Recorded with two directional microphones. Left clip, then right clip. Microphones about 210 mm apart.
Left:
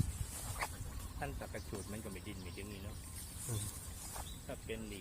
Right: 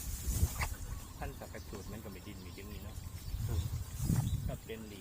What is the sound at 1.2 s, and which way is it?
Speech, 50° left (ahead or behind).